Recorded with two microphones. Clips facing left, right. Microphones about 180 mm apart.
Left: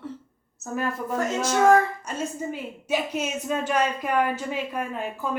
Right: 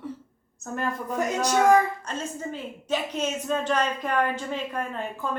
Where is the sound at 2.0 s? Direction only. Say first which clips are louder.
Left 2 dB; 10° left (ahead or behind).